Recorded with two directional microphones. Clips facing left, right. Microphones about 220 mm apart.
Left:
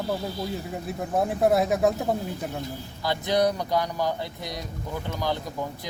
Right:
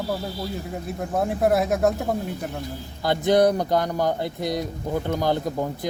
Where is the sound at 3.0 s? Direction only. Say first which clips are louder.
Right 5 dB; 50° right (ahead or behind).